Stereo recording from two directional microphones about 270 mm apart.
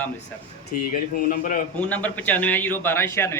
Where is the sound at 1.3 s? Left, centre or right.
Left.